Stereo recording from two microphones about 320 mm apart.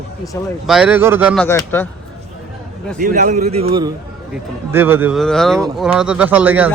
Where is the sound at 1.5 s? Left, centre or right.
Centre.